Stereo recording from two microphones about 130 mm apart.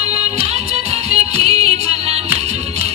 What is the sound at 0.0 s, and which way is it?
Music, 50° right (ahead or behind).